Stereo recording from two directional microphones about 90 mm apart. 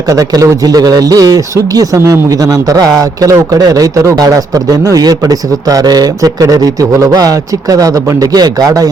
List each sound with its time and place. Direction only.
0.1 s a man's voice: 40° right (ahead or behind)